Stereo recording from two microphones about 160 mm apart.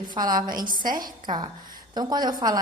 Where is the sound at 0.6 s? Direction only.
60° right (ahead or behind).